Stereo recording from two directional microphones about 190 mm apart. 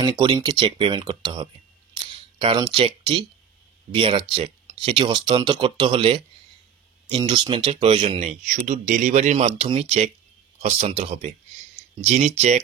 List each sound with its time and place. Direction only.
0.0 s speech: 25° right (ahead or behind)